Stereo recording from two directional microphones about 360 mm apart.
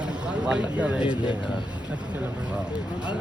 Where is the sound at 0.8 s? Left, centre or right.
Centre.